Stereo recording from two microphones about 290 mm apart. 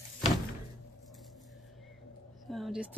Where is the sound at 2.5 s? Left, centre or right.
Centre.